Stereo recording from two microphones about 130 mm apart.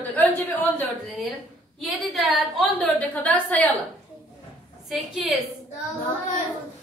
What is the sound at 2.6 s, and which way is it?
Speech, 10° left (ahead or behind).